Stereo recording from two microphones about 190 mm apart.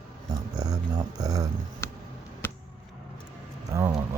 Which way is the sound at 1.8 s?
15° left (ahead or behind).